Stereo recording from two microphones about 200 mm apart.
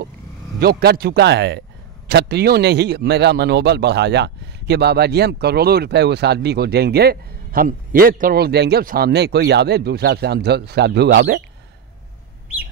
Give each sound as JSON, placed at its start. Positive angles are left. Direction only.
{"t": 0.6, "sound": "a man's voice", "side_deg": -50}